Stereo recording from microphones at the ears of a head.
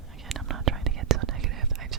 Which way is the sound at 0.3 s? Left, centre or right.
Right.